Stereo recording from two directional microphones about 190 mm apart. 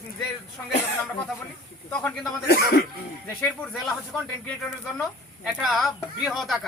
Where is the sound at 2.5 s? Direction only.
55° left (ahead or behind).